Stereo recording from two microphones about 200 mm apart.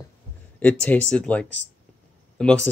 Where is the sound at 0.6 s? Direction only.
10° left (ahead or behind).